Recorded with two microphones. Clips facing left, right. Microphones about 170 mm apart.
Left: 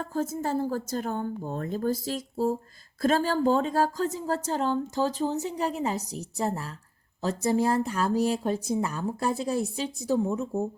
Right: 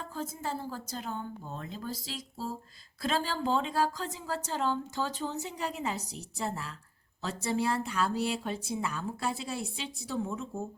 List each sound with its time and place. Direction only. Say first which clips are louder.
0.0 s a woman's voice: left 8 dB; 45° left (ahead or behind)